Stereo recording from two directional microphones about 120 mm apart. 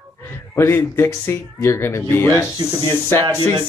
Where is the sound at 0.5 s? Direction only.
20° left (ahead or behind).